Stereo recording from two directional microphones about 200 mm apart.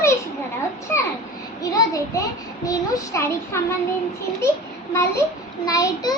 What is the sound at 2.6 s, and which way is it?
Speech, 15° left (ahead or behind).